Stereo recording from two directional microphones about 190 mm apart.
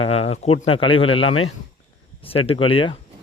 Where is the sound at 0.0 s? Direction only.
35° left (ahead or behind).